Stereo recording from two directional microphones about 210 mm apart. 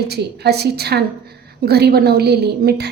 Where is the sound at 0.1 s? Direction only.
50° right (ahead or behind).